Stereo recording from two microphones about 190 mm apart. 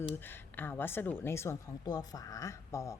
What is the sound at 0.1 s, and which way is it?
A woman's voice, 10° left (ahead or behind).